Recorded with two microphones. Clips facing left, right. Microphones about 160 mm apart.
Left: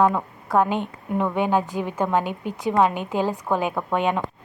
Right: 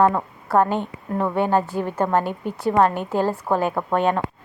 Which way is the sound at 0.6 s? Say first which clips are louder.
Right 1 dB; 10° left (ahead or behind).